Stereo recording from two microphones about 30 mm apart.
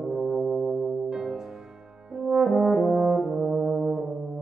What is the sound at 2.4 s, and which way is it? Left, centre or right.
Brass instrument, centre.